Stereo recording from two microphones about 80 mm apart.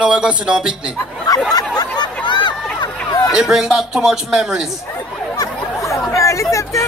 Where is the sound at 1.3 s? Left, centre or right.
Left.